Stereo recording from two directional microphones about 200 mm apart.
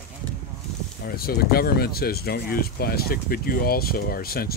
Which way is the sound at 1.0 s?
50° left (ahead or behind).